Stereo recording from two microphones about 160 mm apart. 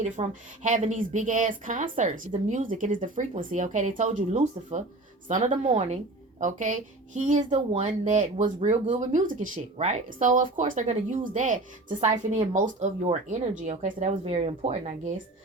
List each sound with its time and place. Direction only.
0.0 s speech: 50° right (ahead or behind)
14.3 s speech: 40° right (ahead or behind)